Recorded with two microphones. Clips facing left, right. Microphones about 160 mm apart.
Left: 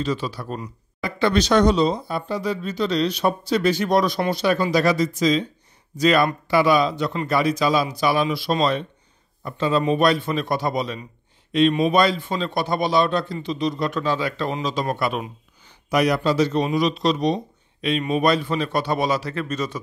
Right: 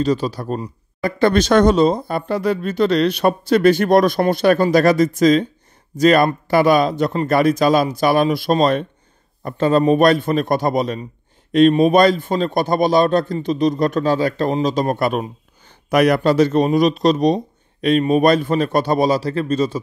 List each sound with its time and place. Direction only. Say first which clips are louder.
0.0 s speech: right 7 dB; 40° right (ahead or behind)
15.9 s speech: right 5 dB; 55° right (ahead or behind); by 19.8 s 30° right (ahead or behind)